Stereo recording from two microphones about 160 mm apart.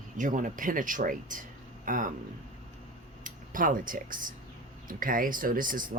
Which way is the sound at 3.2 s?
60° right (ahead or behind).